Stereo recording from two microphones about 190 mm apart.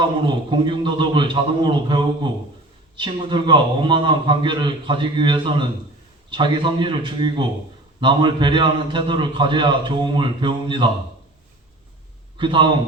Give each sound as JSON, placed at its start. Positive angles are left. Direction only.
{"t": 0.0, "sound": "a man's voice", "side_deg": -25}
{"t": 12.4, "sound": "a man's voice", "side_deg": -25}